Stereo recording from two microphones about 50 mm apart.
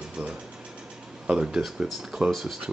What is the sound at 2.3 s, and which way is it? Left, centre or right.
Speech, centre.